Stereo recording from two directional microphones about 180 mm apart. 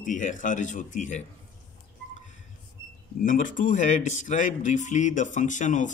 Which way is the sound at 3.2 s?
45° left (ahead or behind).